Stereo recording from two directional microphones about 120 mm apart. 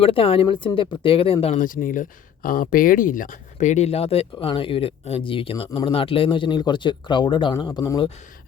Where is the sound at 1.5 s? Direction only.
90° left; by 7.5 s 40° left (ahead or behind).